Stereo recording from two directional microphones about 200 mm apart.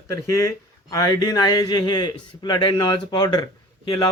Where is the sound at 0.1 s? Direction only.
15° left (ahead or behind).